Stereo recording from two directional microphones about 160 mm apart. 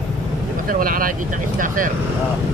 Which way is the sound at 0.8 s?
60° right (ahead or behind).